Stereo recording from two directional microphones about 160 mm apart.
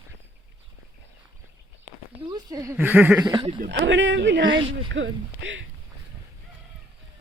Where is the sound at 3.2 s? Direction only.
30° right (ahead or behind).